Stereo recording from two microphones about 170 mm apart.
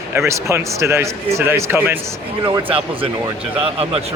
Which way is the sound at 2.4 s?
25° right (ahead or behind).